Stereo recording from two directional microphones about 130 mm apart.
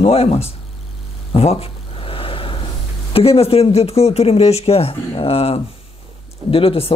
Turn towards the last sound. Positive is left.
turn(degrees=45)  # may be behind; listen again after turning